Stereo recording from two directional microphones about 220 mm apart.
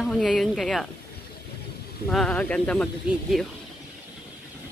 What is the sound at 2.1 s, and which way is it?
Speech, 5° left (ahead or behind).